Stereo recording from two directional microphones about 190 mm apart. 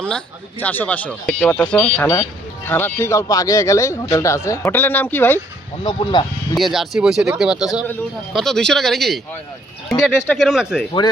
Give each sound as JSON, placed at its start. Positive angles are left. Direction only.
{"t": 0.6, "sound": "speech", "side_deg": 10}
{"t": 5.8, "sound": "speech", "side_deg": 25}
{"t": 6.6, "sound": "speech", "side_deg": 0}